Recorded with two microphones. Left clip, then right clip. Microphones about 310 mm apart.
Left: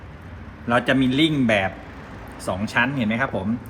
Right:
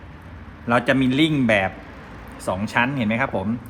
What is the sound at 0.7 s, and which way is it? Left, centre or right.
Speech, right.